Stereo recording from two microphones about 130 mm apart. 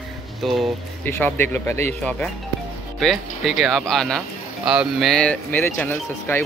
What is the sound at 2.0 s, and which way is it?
Speech, 10° left (ahead or behind).